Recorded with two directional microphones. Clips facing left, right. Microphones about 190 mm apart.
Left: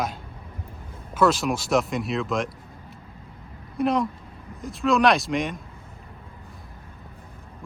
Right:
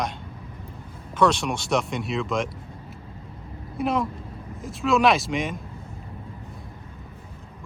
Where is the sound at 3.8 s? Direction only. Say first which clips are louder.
Left 2 dB; centre (ahead or behind).